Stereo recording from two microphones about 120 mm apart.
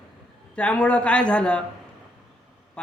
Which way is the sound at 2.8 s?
10° left (ahead or behind).